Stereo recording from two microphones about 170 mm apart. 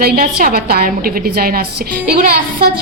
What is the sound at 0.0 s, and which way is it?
A woman's voice, 60° right (ahead or behind).